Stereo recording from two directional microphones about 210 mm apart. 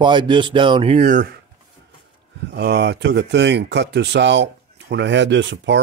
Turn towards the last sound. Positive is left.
turn(degrees=-60)  # may be behind; listen again after turning